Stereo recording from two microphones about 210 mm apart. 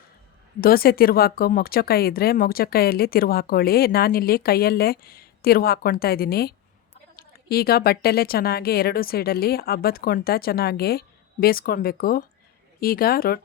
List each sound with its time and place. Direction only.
0.6 s speech: 45° left (ahead or behind)